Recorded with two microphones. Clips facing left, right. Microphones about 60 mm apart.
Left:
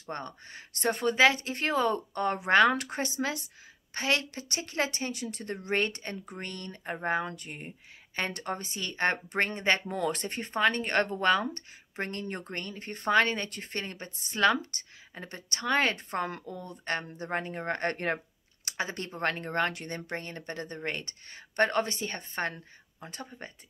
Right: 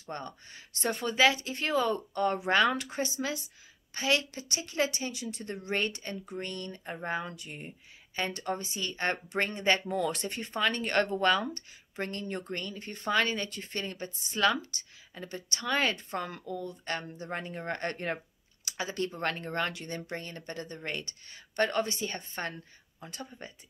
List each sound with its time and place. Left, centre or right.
0.0 s a woman's voice: left